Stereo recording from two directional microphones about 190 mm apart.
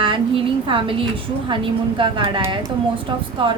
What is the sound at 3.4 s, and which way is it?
Speech, 25° right (ahead or behind).